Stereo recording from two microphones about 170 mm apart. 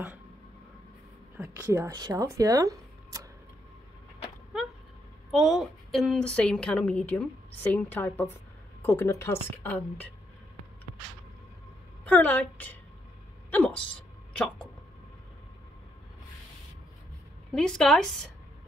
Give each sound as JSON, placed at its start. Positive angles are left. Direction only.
{"t": 1.4, "sound": "speech", "side_deg": -15}
{"t": 5.3, "sound": "a woman's voice", "side_deg": 0}
{"t": 12.0, "sound": "a woman's voice", "side_deg": 10}
{"t": 13.5, "sound": "a sound", "side_deg": 10}
{"t": 17.5, "sound": "a woman's voice", "side_deg": 5}